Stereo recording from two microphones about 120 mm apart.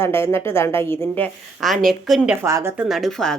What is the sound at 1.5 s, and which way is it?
Speech, centre (ahead or behind).